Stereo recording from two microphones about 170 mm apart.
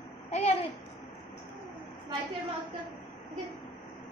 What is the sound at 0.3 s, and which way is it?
Babbling, 40° left (ahead or behind).